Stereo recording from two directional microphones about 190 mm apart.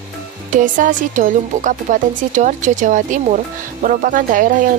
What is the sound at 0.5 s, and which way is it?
Speech, 45° right (ahead or behind).